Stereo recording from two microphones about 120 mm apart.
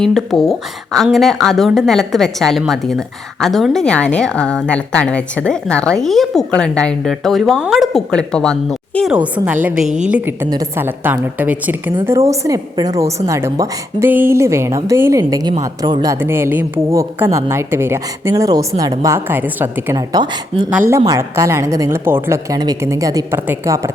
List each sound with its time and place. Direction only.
0.0 s a woman's voice: centre (ahead or behind)
9.1 s a woman's voice: 10° right (ahead or behind)
12.0 s a woman's voice: 25° right (ahead or behind)
16.2 s a woman's voice: 20° right (ahead or behind)